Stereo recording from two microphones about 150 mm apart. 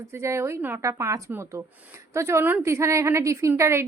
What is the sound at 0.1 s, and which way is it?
A woman's voice, 20° right (ahead or behind).